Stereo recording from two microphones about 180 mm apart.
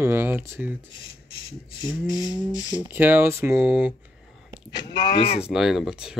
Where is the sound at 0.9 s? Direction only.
30° left (ahead or behind).